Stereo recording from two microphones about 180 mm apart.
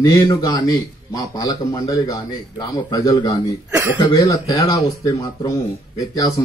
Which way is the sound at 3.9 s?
20° left (ahead or behind).